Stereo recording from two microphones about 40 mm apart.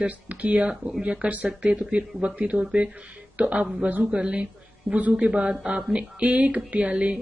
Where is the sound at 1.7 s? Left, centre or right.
Right.